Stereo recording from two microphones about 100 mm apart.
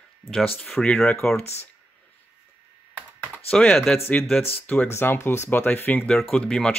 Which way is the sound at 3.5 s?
5° left (ahead or behind).